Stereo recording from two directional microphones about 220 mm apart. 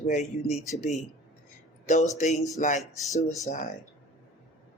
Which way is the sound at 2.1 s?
30° left (ahead or behind).